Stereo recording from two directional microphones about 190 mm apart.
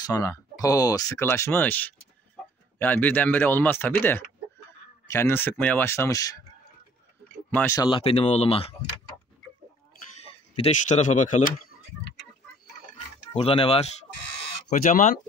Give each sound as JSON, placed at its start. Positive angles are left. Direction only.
{"t": 0.0, "sound": "speech", "side_deg": 15}
{"t": 7.5, "sound": "speech", "side_deg": 15}
{"t": 8.0, "sound": "speech", "side_deg": 35}
{"t": 10.2, "sound": "speech", "side_deg": 30}
{"t": 13.3, "sound": "speech", "side_deg": 30}
{"t": 14.7, "sound": "speech", "side_deg": 45}